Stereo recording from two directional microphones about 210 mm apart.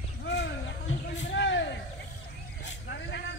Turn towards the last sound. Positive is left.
turn(degrees=55)  # may be behind; listen again after turning